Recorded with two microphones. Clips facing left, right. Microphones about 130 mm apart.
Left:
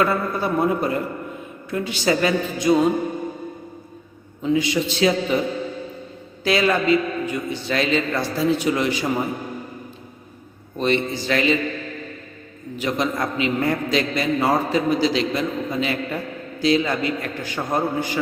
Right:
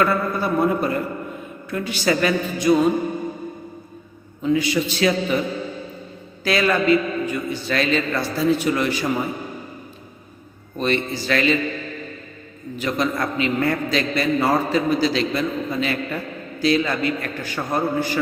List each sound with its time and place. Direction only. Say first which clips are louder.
0.0 s a man's voice: right 1 dB; 20° left (ahead or behind)
4.4 s a man's voice: even; 25° left (ahead or behind)
6.4 s a man's voice: even; 20° left (ahead or behind)
10.8 s a man's voice: left 1 dB; 20° left (ahead or behind)
12.7 s a man's voice: even; 20° left (ahead or behind)